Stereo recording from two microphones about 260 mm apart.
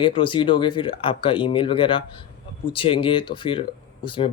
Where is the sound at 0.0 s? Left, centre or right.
Centre.